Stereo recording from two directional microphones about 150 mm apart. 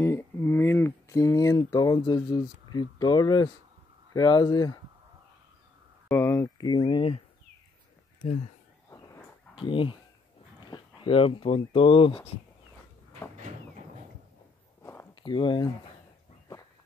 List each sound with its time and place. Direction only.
0.0 s speech: 15° left (ahead or behind)
6.0 s speech: 15° left (ahead or behind)
6.6 s speech: 30° left (ahead or behind)
9.6 s speech: 35° left (ahead or behind)
14.8 s walk: 20° left (ahead or behind)
15.2 s speech: 30° left (ahead or behind)